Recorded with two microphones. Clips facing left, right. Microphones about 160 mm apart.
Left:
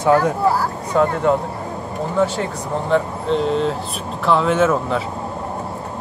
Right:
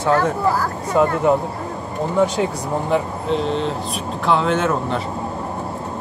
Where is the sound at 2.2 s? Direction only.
15° right (ahead or behind).